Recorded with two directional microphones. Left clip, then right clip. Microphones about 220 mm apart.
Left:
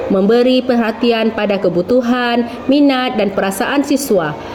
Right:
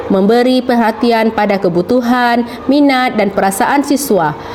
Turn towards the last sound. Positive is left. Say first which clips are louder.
# right 2 dB
turn(degrees=-30)  # may be behind; listen again after turning